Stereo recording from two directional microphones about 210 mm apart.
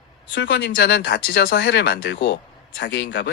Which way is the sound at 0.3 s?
60° left (ahead or behind).